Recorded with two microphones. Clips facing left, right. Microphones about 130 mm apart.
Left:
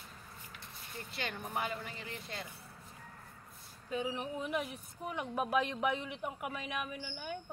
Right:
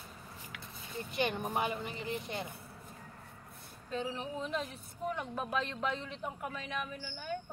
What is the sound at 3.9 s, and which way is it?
Speech, 15° left (ahead or behind).